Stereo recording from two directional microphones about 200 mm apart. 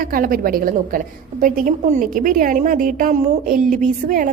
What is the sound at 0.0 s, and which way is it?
A woman's voice, 45° right (ahead or behind).